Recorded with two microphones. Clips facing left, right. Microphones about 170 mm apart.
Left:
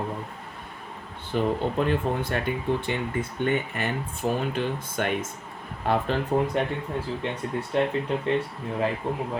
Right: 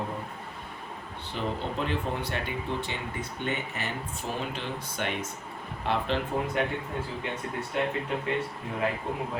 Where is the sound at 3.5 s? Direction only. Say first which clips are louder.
Left 5 dB; 55° left (ahead or behind).